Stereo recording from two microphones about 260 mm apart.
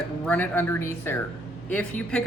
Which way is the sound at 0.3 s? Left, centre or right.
Centre.